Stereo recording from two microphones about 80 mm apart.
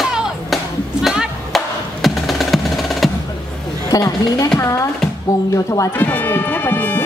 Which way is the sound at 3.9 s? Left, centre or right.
Left.